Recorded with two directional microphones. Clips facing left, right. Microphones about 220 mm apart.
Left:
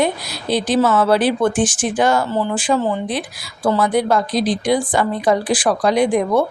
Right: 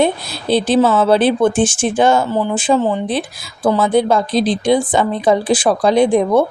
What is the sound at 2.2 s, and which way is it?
Speech, 15° right (ahead or behind).